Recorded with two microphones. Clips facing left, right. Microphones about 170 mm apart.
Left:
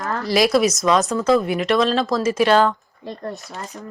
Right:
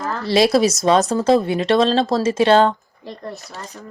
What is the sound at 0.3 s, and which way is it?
Speech, 30° right (ahead or behind).